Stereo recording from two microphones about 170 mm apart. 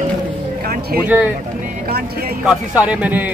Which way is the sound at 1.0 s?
10° right (ahead or behind).